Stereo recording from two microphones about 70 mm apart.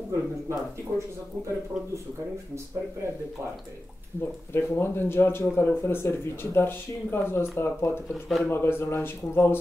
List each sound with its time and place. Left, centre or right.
0.1 s speech: right
4.5 s speech: left
8.1 s speech: centre
8.5 s speech: left